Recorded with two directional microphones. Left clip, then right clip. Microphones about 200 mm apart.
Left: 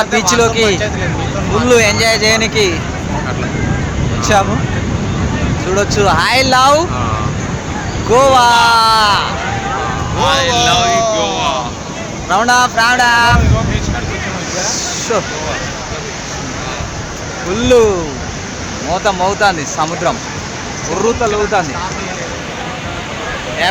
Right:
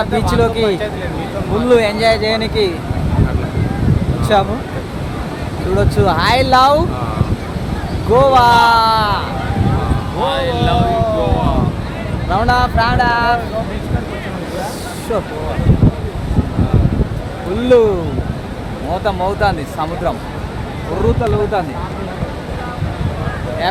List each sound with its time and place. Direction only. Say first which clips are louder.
0.0 s speech: left 4 dB; 5° left (ahead or behind)
4.2 s speech: left 2 dB; 5° left (ahead or behind)
5.7 s speech: left 3 dB; 10° left (ahead or behind)
8.1 s speech: left 1 dB; 10° left (ahead or behind)
10.2 s speech: left 5 dB; 20° right (ahead or behind)
12.3 s speech: left 4 dB; 10° left (ahead or behind)
17.6 s speech: left 1 dB; 10° left (ahead or behind)
19.0 s speech: left 4 dB; 20° left (ahead or behind)